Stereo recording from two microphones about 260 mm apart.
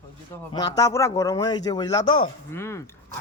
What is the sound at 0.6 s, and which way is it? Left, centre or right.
Speech, centre.